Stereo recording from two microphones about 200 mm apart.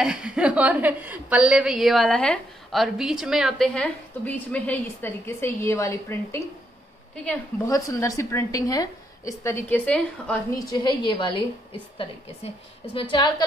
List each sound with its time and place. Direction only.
0.0 s a woman's voice: 5° right (ahead or behind); by 6.4 s 15° left (ahead or behind)
7.6 s a woman's voice: 15° left (ahead or behind)
10.6 s a woman's voice: 20° left (ahead or behind)
12.9 s a woman's voice: 25° left (ahead or behind)